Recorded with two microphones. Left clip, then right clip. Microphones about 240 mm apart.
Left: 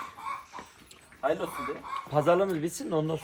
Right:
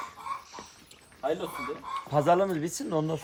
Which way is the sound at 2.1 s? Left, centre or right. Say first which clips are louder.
Right 1 dB; right.